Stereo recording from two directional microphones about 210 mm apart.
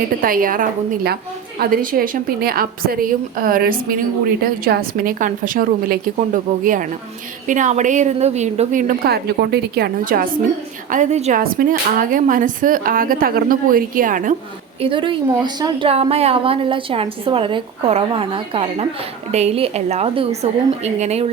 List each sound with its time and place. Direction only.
0.2 s a woman's voice: 40° right (ahead or behind)
14.8 s a woman's voice: 25° right (ahead or behind)